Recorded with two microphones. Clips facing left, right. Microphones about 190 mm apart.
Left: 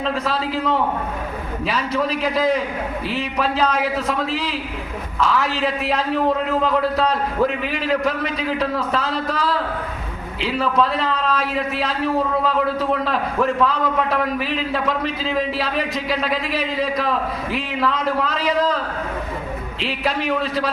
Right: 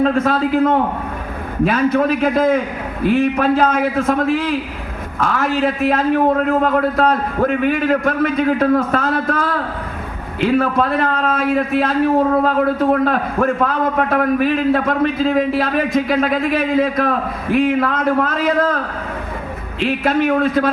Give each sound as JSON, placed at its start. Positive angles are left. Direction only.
{"t": 0.0, "sound": "a man's voice", "side_deg": -50}
{"t": 19.8, "sound": "a man's voice", "side_deg": -50}